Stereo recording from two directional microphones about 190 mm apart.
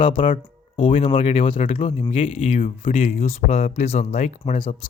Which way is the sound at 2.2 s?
40° left (ahead or behind).